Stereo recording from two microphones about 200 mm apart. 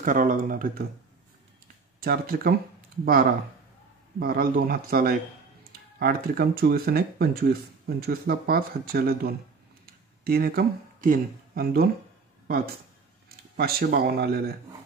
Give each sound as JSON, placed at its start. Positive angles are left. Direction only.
{"t": 0.0, "sound": "speech", "side_deg": -40}
{"t": 2.0, "sound": "speech", "side_deg": -50}
{"t": 13.6, "sound": "speech", "side_deg": -50}